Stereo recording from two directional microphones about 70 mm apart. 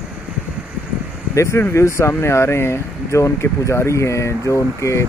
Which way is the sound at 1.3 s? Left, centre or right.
Left.